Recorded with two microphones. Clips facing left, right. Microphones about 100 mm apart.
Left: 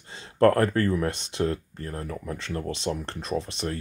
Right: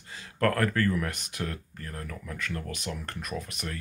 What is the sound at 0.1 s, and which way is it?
Speech, 30° left (ahead or behind).